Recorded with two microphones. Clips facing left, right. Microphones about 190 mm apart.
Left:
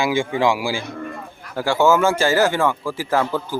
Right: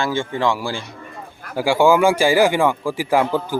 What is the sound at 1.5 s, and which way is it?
Speech, 10° right (ahead or behind).